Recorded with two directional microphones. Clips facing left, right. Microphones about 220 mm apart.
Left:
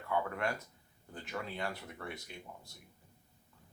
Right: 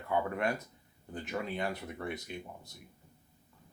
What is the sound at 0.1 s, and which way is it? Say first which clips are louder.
Speech: right 3 dB; 20° right (ahead or behind).